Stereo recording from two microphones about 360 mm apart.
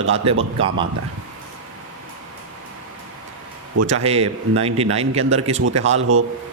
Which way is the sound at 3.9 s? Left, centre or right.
Centre.